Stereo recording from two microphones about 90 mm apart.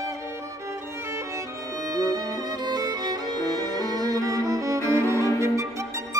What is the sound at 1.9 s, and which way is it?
Music, 40° right (ahead or behind).